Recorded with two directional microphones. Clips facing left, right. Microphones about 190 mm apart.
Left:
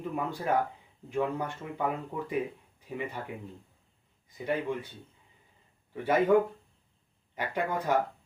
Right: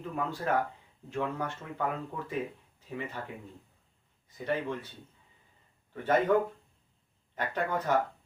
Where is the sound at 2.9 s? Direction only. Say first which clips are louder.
Left 1 dB; 15° left (ahead or behind).